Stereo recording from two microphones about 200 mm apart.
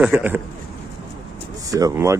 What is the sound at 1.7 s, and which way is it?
Speech, 15° right (ahead or behind).